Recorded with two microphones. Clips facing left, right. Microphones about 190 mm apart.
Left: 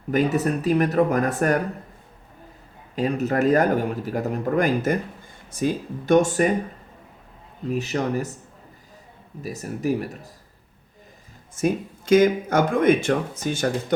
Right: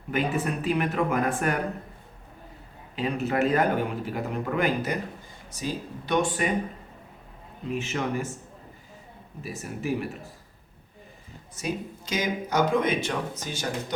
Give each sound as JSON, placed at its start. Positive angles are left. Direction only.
{"t": 0.1, "sound": "speech", "side_deg": 40}
{"t": 2.9, "sound": "speech", "side_deg": 45}
{"t": 7.7, "sound": "speech", "side_deg": 40}
{"t": 9.4, "sound": "speech", "side_deg": 40}
{"t": 11.5, "sound": "speech", "side_deg": 50}